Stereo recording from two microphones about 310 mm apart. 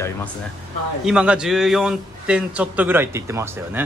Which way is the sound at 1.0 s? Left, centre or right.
Centre.